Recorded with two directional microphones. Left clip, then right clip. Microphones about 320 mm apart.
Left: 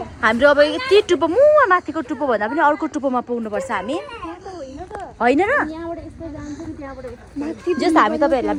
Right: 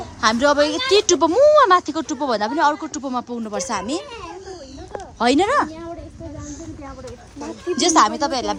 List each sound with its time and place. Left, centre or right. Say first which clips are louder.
0.2 s speech: left 3 dB; centre
5.2 s speech: even; centre
7.9 s speech: left 2 dB; centre